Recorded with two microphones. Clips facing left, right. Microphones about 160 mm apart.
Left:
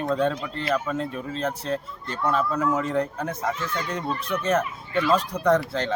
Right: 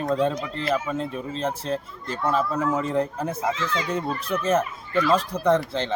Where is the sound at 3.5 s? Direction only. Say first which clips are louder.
Right 2 dB; 90° right.